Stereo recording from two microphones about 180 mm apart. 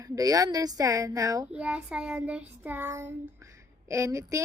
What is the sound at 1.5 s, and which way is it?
A child's voice, 5° right (ahead or behind).